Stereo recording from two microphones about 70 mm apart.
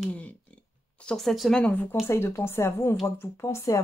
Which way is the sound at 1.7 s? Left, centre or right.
Left.